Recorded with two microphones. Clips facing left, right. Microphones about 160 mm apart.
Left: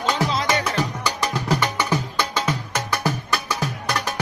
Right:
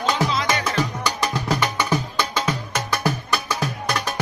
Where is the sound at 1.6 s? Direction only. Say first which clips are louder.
Right 1 dB; 10° right (ahead or behind).